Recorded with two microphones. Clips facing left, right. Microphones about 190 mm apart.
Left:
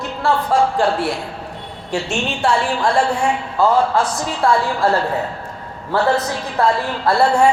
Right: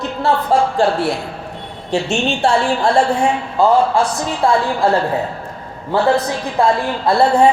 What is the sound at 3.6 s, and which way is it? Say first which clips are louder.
Speech: right 2 dB; 15° right (ahead or behind).